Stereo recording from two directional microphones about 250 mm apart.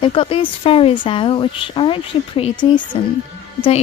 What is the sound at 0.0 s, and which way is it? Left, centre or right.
A woman's voice, left.